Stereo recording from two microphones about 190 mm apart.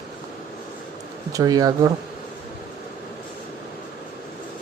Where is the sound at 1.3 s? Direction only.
20° right (ahead or behind).